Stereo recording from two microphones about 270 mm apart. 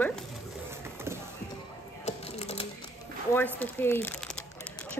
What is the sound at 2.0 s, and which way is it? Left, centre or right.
Typing, left.